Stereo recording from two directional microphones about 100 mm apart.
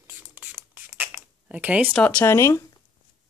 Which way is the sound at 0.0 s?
15° right (ahead or behind).